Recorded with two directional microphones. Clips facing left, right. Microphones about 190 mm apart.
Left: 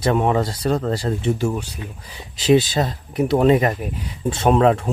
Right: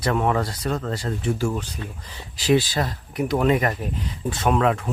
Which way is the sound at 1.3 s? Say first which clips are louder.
Left 1 dB; 20° left (ahead or behind).